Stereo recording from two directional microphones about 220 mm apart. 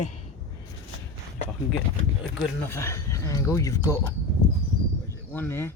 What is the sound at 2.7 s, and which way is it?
Speech, 15° left (ahead or behind).